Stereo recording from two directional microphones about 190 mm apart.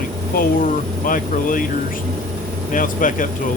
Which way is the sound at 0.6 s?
45° left (ahead or behind).